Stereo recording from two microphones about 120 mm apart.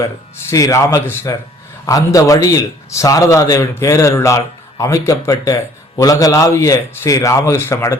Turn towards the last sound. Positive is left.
turn(degrees=20)  # may be behind; listen again after turning